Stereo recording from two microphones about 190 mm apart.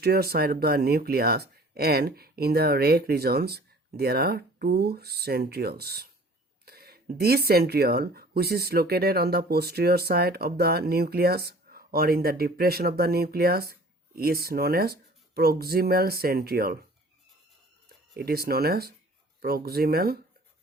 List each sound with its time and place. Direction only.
0.0 s speech: 55° right (ahead or behind)
18.1 s speech: 55° right (ahead or behind)